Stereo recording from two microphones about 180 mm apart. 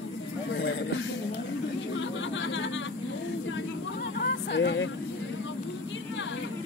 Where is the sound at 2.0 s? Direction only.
90° left.